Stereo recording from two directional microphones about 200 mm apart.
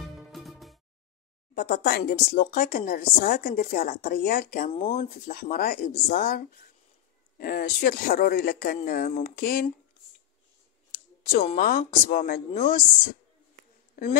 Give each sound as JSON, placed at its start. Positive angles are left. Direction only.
{"t": 0.0, "sound": "music", "side_deg": 0}
{"t": 1.5, "sound": "speech", "side_deg": 50}
{"t": 11.3, "sound": "speech", "side_deg": 40}
{"t": 14.0, "sound": "speech", "side_deg": 50}